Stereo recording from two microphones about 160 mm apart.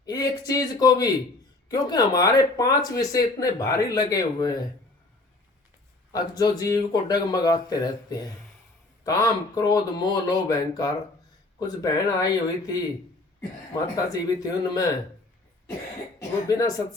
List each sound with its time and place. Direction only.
0.0 s speech: 25° left (ahead or behind)
6.1 s speech: 25° left (ahead or behind)
13.9 s speech: 25° left (ahead or behind)
16.5 s speech: 25° left (ahead or behind)